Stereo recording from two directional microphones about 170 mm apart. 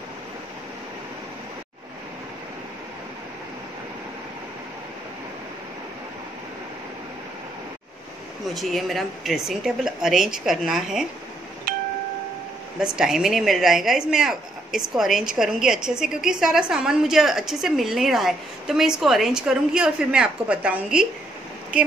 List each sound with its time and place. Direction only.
8.5 s speech: centre (ahead or behind)
11.7 s wind chime: 55° right (ahead or behind)
12.8 s speech: 5° right (ahead or behind)